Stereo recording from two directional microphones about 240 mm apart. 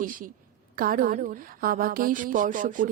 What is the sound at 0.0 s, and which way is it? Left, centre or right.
Speech, right.